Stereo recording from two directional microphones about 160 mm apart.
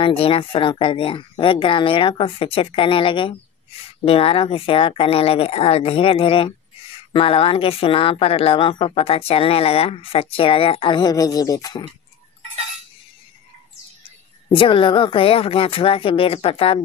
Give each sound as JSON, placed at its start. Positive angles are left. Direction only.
{"t": 0.0, "sound": "speech", "side_deg": 35}
{"t": 14.5, "sound": "speech", "side_deg": 30}